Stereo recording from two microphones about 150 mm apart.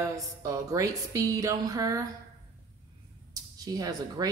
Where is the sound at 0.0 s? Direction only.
20° right (ahead or behind).